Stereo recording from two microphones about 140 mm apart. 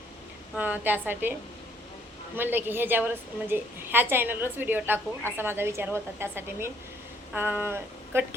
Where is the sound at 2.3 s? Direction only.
15° right (ahead or behind).